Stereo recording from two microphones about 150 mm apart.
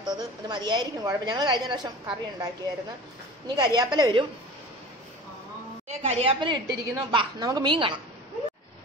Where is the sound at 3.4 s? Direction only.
30° right (ahead or behind).